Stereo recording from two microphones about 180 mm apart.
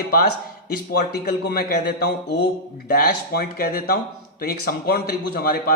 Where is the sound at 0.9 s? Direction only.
60° left (ahead or behind).